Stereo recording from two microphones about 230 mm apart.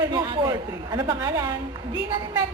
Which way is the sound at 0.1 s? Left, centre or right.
Centre.